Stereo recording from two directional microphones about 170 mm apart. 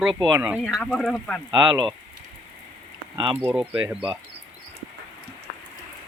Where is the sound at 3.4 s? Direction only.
10° right (ahead or behind).